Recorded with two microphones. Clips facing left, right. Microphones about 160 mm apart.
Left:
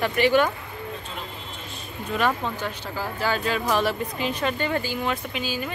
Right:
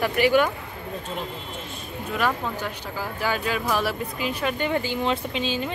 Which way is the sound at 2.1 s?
10° right (ahead or behind).